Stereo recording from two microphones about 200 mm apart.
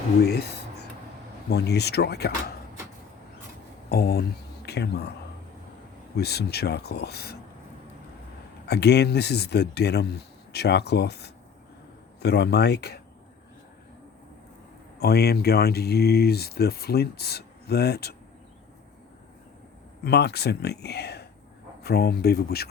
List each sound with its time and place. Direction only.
0.2 s speech: 55° left (ahead or behind)
1.5 s speech: 55° left (ahead or behind)
3.8 s speech: 50° left (ahead or behind)
6.1 s speech: 55° left (ahead or behind)
8.6 s speech: 55° left (ahead or behind)
14.9 s speech: 55° left (ahead or behind)
20.1 s speech: 55° left (ahead or behind)